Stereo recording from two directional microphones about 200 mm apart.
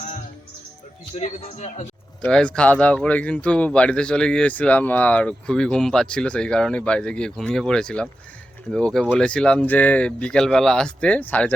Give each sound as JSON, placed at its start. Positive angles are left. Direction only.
{"t": 1.1, "sound": "speech", "side_deg": 35}
{"t": 2.2, "sound": "speech", "side_deg": 5}